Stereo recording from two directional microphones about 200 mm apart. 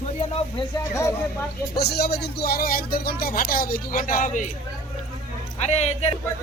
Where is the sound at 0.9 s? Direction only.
15° left (ahead or behind).